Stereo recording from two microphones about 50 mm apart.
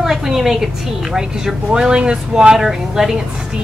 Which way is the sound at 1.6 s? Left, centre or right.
Centre.